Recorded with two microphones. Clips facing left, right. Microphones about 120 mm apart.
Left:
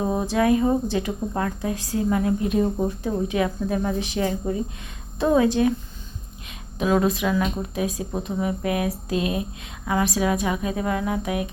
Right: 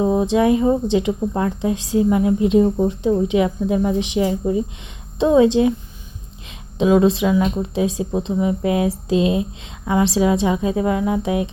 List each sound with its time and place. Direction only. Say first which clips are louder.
0.0 s speech: right 5 dB; 20° right (ahead or behind)
6.7 s speech: right 6 dB; 25° right (ahead or behind)